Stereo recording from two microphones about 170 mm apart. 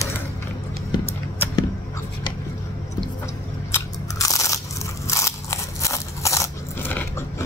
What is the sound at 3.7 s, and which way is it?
Crunch, 20° left (ahead or behind).